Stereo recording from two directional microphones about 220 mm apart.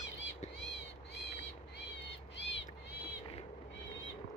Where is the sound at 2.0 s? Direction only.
55° left (ahead or behind).